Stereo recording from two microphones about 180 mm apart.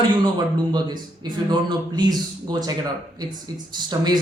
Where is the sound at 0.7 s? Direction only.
25° right (ahead or behind).